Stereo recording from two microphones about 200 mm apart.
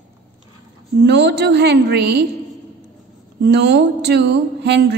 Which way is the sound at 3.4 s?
55° right (ahead or behind).